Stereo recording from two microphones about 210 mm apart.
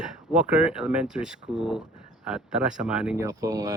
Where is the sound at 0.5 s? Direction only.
5° right (ahead or behind).